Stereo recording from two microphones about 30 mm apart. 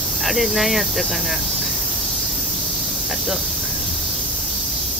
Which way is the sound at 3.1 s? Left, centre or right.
Centre.